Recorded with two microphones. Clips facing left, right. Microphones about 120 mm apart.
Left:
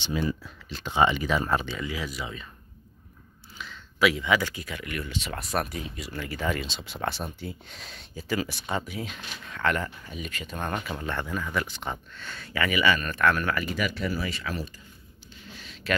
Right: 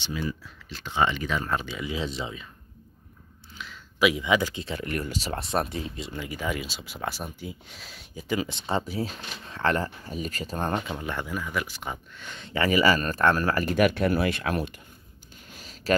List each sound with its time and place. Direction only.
0.0 s speech: 25° left (ahead or behind); by 1.7 s 5° left (ahead or behind)
1.7 s speech: 15° right (ahead or behind)
2.0 s speech: 25° right (ahead or behind)
3.5 s a sound: centre (ahead or behind)
4.0 s speech: 15° right (ahead or behind)
8.2 s speech: 20° right (ahead or behind)
10.9 s speech: 15° right (ahead or behind); by 13.7 s 35° right (ahead or behind)
13.7 s speech: 55° right (ahead or behind)
15.4 s a sound: 45° right (ahead or behind)